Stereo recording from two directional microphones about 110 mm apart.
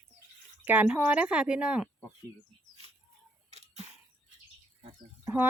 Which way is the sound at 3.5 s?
80° right.